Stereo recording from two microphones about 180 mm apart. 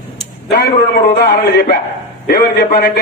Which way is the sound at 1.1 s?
65° left (ahead or behind).